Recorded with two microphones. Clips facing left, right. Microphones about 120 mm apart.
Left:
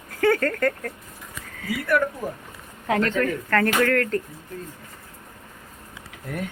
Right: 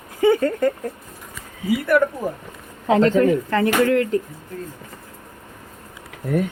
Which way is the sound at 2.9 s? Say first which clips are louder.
Right 7 dB; 25° right (ahead or behind).